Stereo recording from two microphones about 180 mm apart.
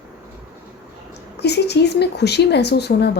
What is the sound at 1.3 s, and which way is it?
Speech, 65° left (ahead or behind).